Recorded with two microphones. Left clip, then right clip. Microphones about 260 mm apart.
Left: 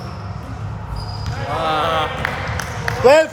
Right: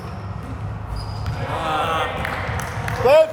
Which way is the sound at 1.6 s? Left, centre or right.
Left.